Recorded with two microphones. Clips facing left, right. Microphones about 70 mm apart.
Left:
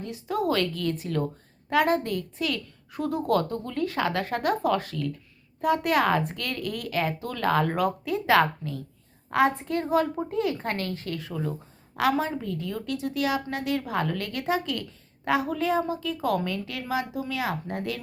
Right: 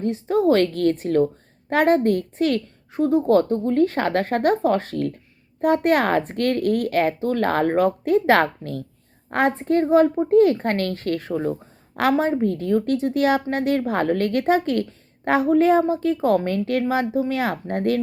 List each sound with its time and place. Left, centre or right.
0.0 s a woman's voice: right
2.9 s a woman's voice: right
10.2 s a woman's voice: right